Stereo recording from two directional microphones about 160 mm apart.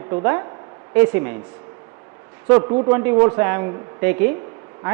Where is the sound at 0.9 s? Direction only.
15° right (ahead or behind).